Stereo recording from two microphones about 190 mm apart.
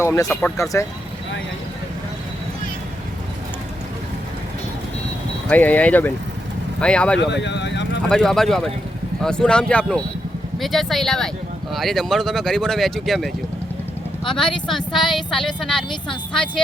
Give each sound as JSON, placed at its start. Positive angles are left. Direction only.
{"t": 0.0, "sound": "speech", "side_deg": 15}
{"t": 5.5, "sound": "speech", "side_deg": 10}
{"t": 7.2, "sound": "speech", "side_deg": 65}
{"t": 8.1, "sound": "speech", "side_deg": 0}
{"t": 14.8, "sound": "a sound", "side_deg": 25}
{"t": 15.1, "sound": "speech", "side_deg": 0}